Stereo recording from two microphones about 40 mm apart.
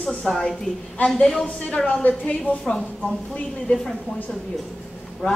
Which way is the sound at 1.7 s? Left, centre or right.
Left.